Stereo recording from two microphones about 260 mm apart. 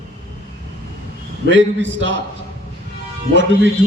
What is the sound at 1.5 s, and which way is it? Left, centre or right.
Speech, right.